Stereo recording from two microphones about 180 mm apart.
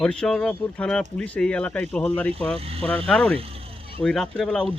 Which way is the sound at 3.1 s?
5° left (ahead or behind).